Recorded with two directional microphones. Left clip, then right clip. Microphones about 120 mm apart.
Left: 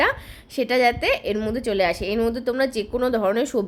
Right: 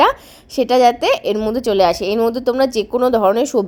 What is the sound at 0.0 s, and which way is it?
A woman's voice, 35° right (ahead or behind).